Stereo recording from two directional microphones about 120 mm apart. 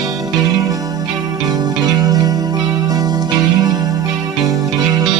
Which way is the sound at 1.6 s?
30° right (ahead or behind).